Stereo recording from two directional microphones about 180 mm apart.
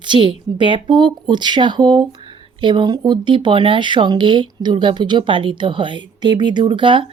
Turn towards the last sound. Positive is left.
turn(degrees=-25)  # may be behind; listen again after turning